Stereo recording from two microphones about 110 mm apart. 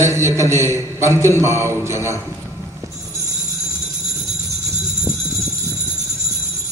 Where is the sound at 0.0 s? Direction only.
25° right (ahead or behind).